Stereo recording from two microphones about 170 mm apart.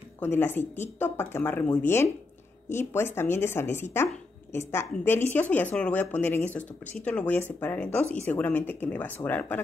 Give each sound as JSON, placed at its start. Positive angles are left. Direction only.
{"t": 0.2, "sound": "speech", "side_deg": 15}